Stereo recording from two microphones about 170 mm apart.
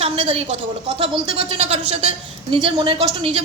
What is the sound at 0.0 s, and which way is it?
A woman's voice, 35° right (ahead or behind).